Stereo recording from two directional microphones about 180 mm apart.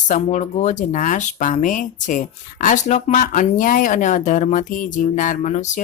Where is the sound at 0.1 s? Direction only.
45° left (ahead or behind).